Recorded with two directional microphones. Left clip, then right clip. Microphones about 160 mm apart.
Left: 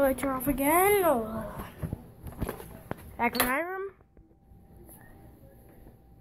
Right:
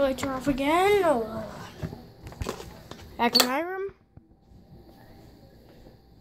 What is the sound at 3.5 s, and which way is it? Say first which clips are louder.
Cash register: right 2 dB; 10° right (ahead or behind).